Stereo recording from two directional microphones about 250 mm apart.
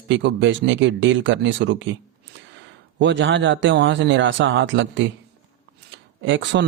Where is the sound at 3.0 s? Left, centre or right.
Right.